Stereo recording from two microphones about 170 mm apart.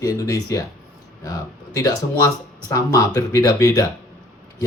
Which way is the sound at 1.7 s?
20° left (ahead or behind).